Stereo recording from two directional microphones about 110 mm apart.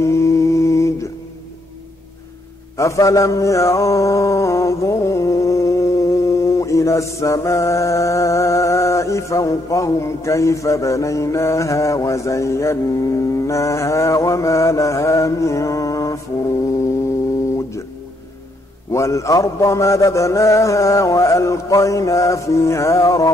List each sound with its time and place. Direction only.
0.0 s mantra: 25° left (ahead or behind)
2.8 s mantra: 30° left (ahead or behind)
17.5 s guitar: 25° left (ahead or behind)
18.9 s mantra: 25° left (ahead or behind)